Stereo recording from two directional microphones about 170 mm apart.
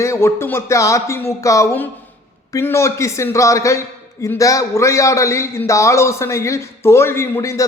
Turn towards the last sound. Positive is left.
turn(degrees=20)  # may be behind; listen again after turning